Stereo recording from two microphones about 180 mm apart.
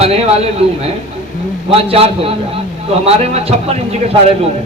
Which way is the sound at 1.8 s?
30° right (ahead or behind).